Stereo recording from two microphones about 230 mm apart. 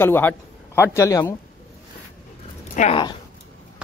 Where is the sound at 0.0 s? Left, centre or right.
Centre.